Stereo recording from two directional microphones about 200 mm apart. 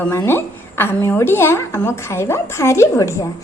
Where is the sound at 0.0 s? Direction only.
10° left (ahead or behind).